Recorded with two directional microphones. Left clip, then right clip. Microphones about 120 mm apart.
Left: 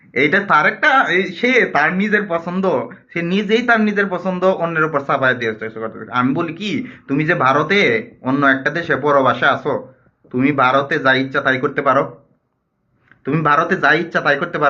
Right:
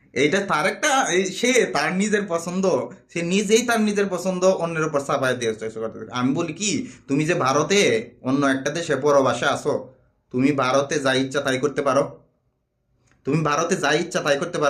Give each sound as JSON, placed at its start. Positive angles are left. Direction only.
{"t": 0.1, "sound": "speech", "side_deg": -40}
{"t": 13.2, "sound": "speech", "side_deg": -40}